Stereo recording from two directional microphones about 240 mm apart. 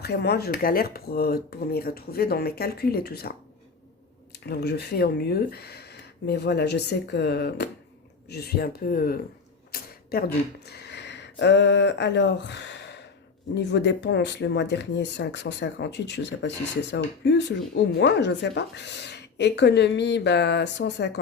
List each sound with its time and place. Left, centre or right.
0.0 s speech: left
4.4 s speech: left
9.7 s camera: left
10.7 s speech: left